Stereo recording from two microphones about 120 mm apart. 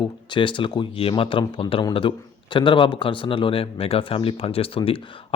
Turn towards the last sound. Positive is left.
turn(degrees=50)  # may be behind; listen again after turning